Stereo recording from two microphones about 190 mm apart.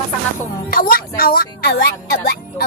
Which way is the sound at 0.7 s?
50° left (ahead or behind).